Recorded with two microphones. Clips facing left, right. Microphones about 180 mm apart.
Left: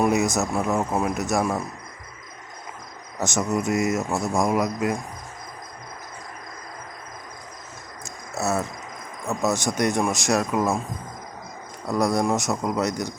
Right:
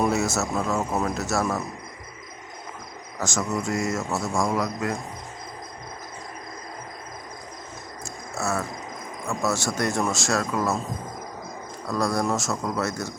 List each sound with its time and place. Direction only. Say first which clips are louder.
0.0 s speech: left 2 dB; 15° left (ahead or behind)
3.2 s speech: left 3 dB; 20° left (ahead or behind)
8.4 s speech: left 3 dB; 20° left (ahead or behind)
11.9 s speech: left 3 dB; 20° left (ahead or behind)